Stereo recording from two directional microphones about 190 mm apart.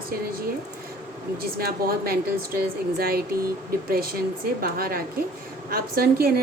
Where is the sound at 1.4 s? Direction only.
50° right (ahead or behind).